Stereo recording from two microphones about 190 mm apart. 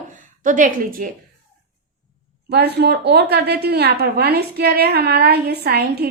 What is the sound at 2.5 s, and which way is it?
A woman's voice, 60° right (ahead or behind).